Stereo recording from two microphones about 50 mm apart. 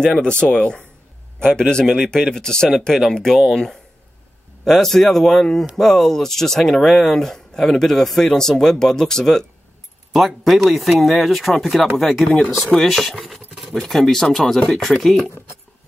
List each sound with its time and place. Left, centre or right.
0.2 s speech: centre
4.6 s speech: centre